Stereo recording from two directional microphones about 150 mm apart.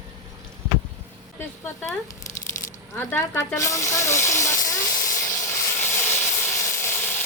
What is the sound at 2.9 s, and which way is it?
Sizzle, 15° left (ahead or behind).